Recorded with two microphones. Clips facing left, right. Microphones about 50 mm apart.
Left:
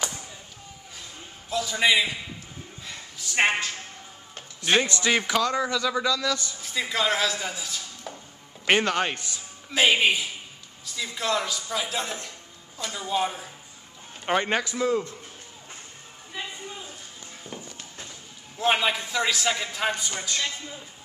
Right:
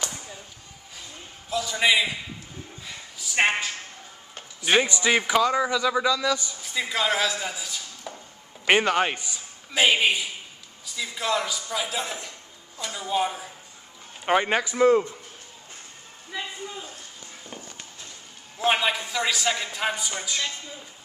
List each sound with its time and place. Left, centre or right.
1.5 s a man's voice: centre
2.8 s a sound: centre
4.4 s speech: centre
6.6 s speech: centre
8.6 s speech: centre
9.7 s a man's voice: centre
14.7 s speech: right
18.6 s a man's voice: centre